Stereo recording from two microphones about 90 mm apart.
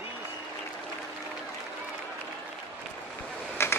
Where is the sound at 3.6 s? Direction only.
30° left (ahead or behind).